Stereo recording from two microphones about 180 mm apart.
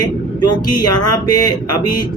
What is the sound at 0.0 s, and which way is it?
Speech, 25° left (ahead or behind).